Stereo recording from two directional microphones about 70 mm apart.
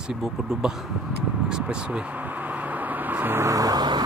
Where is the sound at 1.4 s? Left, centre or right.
Centre.